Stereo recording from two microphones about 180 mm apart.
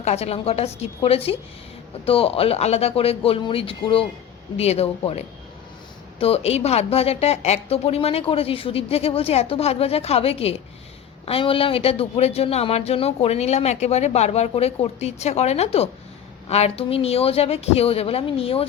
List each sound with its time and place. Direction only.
0.0 s speech: 35° left (ahead or behind)